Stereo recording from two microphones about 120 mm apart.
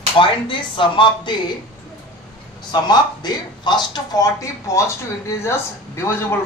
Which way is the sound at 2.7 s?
35° left (ahead or behind).